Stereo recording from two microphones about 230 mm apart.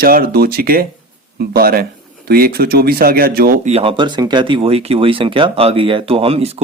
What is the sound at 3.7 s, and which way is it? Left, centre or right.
Speech, right.